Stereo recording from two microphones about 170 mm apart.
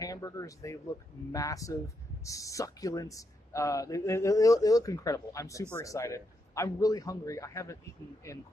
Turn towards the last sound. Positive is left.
turn(degrees=20)  # may be behind; listen again after turning